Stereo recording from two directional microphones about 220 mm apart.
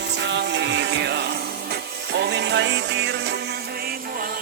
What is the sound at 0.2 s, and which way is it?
Music, 55° right (ahead or behind).